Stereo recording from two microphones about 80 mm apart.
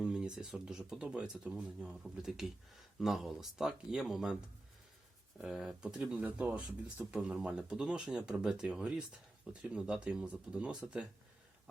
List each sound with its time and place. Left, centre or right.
0.0 s speech: centre
6.2 s speech: centre
7.1 s speech: centre